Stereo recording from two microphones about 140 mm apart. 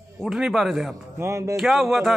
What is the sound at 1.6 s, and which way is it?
Speech, centre (ahead or behind).